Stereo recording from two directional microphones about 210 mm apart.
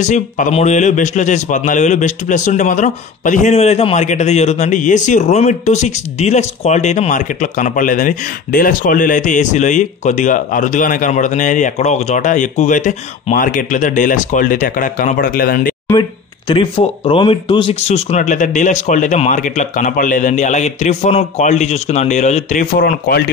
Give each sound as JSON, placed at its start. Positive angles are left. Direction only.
{"t": 0.0, "sound": "a man's voice", "side_deg": 35}
{"t": 15.9, "sound": "a man's voice", "side_deg": 20}